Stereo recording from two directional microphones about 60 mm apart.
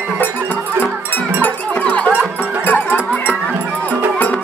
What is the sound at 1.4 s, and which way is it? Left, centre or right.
Cowbell, left.